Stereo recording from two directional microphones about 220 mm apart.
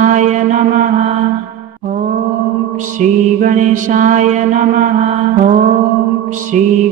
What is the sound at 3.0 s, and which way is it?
Mantra, 35° right (ahead or behind).